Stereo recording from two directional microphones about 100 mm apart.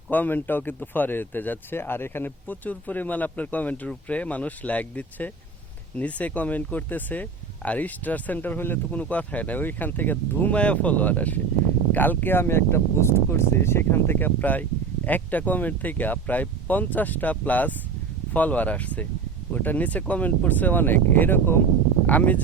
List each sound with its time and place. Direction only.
0.1 s speech: 20° left (ahead or behind)